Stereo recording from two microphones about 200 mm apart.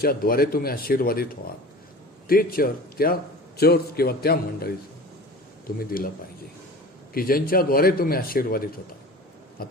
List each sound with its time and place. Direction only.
0.0 s a man's voice: 50° left (ahead or behind)
7.1 s a man's voice: 45° left (ahead or behind)
9.6 s biting: 50° left (ahead or behind)